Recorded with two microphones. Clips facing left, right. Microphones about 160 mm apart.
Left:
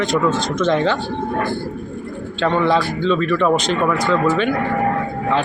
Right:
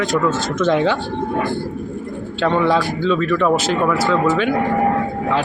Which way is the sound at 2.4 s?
10° right (ahead or behind).